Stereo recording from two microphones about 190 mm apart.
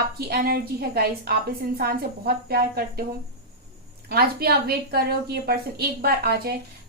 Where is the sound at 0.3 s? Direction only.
55° right (ahead or behind).